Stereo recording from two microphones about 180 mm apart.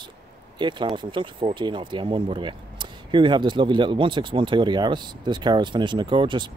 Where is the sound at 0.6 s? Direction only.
25° right (ahead or behind).